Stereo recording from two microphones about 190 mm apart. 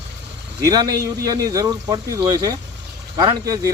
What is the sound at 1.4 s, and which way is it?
Speech, 20° right (ahead or behind).